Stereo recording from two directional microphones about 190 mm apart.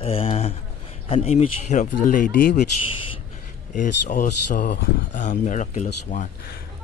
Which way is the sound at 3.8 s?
40° left (ahead or behind).